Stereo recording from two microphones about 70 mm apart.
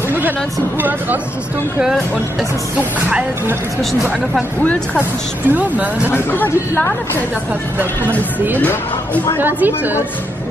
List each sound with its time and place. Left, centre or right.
0.7 s a woman's voice: right
2.8 s a woman's voice: centre
5.5 s a woman's voice: right
6.0 s speech: left
8.0 s speech: left
9.4 s a woman's voice: right